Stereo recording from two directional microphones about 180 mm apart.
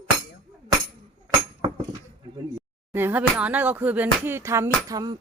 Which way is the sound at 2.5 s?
10° right (ahead or behind).